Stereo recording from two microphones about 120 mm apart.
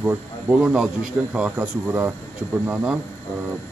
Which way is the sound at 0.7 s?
5° right (ahead or behind).